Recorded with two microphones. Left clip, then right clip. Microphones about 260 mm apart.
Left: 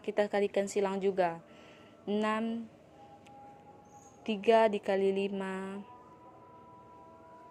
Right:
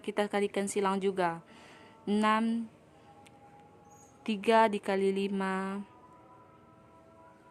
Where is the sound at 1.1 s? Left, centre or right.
Right.